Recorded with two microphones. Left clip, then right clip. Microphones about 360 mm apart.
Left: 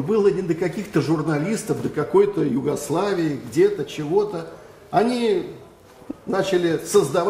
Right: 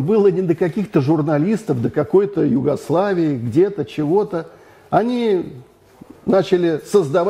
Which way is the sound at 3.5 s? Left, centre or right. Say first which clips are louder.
Right 1 dB; right.